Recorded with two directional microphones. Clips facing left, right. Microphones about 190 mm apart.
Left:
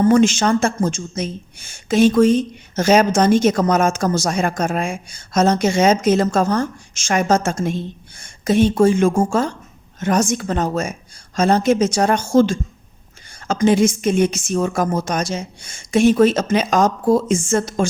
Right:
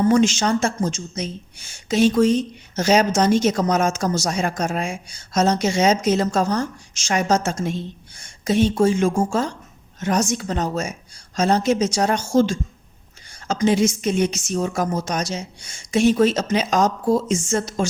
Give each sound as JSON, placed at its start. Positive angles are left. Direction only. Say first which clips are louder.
{"t": 0.1, "sound": "speech", "louder": "left 3 dB", "side_deg": 55}